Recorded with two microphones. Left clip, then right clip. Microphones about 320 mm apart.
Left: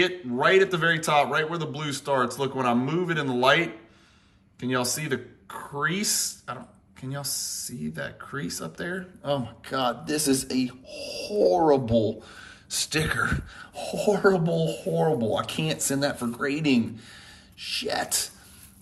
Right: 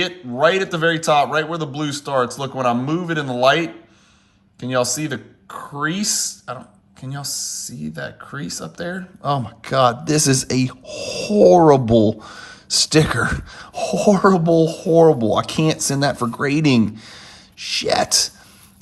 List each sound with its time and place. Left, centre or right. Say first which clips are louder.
0.0 s speech: right 6 dB; centre
11.9 s speech: right 9 dB; centre